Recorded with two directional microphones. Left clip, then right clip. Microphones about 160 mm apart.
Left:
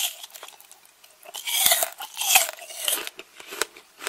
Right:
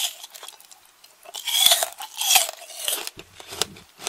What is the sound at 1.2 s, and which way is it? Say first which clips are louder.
Crunch: right 5 dB; 5° left (ahead or behind).